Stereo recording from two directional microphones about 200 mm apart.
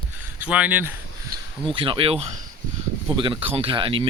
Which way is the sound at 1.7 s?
25° right (ahead or behind).